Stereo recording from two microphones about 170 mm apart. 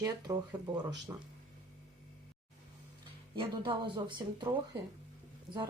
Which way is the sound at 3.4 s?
30° right (ahead or behind).